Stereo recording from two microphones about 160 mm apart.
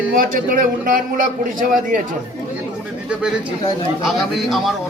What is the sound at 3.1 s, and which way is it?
A man's voice, 5° right (ahead or behind).